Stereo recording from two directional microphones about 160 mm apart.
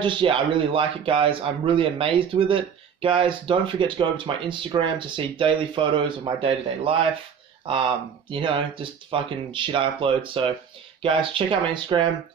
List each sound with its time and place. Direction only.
0.0 s a man's voice: 30° right (ahead or behind)